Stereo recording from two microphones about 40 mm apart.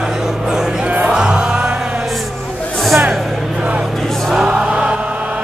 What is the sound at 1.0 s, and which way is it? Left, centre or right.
Music, right.